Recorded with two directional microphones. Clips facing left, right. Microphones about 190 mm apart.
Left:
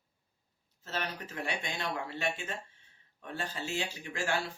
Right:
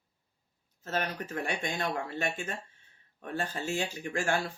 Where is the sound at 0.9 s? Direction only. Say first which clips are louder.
Right 5 dB; 50° right (ahead or behind).